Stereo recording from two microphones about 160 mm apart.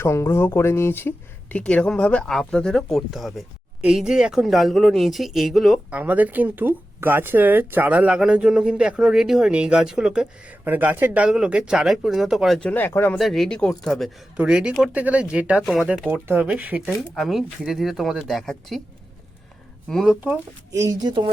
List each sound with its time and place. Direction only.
0.0 s speech: 15° left (ahead or behind)
13.1 s speech: centre (ahead or behind)
16.0 s speech: 10° right (ahead or behind)
19.9 s speech: centre (ahead or behind)
20.7 s speech: 20° right (ahead or behind)